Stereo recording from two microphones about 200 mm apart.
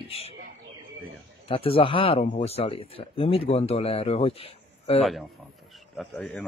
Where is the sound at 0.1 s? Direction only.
30° left (ahead or behind).